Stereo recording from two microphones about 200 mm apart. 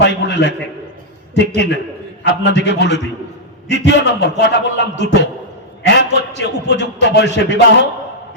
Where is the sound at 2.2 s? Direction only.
60° left (ahead or behind).